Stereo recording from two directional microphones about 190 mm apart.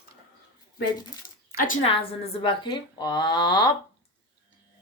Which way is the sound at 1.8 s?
30° left (ahead or behind).